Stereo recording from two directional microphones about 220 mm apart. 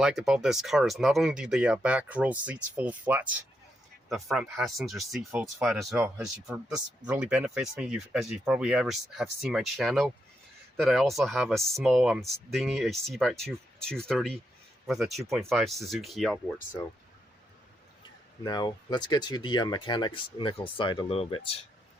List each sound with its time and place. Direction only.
0.0 s speech: centre (ahead or behind)
18.4 s speech: 20° left (ahead or behind)